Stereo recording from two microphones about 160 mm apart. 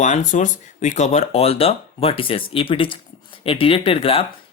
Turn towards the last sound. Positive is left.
turn(degrees=35)  # may be behind; listen again after turning